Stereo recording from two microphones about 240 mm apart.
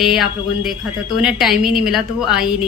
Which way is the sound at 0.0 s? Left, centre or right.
Centre.